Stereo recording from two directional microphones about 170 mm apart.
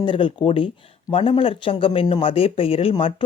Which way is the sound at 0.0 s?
30° left (ahead or behind).